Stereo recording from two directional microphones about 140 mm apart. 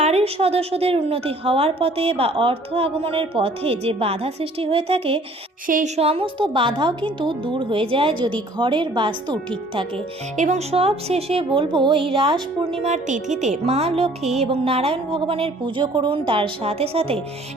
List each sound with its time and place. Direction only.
0.0 s a woman's voice: 50° right (ahead or behind)
5.6 s a woman's voice: 75° right (ahead or behind)
6.0 s a woman's voice: 45° right (ahead or behind)
10.3 s a woman's voice: 60° right (ahead or behind); by 12.4 s 40° right (ahead or behind)
12.8 s a woman's voice: 60° right (ahead or behind)